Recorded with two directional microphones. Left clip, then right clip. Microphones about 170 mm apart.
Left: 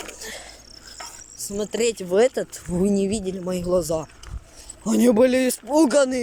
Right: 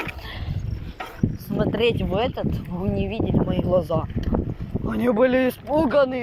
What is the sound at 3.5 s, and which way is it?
Speech, 20° left (ahead or behind).